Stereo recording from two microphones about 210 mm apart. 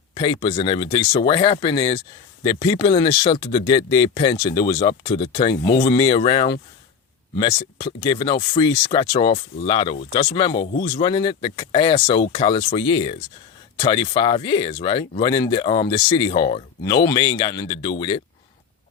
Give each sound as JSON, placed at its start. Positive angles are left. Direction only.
{"t": 0.1, "sound": "speech", "side_deg": 25}
{"t": 10.7, "sound": "speech", "side_deg": 50}
{"t": 11.0, "sound": "speech", "side_deg": 25}